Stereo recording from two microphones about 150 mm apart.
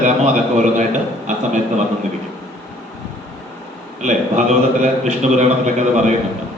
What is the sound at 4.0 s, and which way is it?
A man's voice, 55° right (ahead or behind).